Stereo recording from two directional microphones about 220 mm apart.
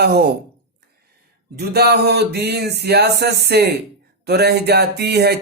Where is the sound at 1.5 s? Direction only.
45° right (ahead or behind).